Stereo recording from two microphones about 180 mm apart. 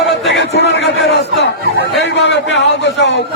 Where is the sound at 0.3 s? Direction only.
70° left (ahead or behind).